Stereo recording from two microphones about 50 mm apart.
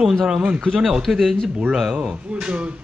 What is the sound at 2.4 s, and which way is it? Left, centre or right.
Speech, right.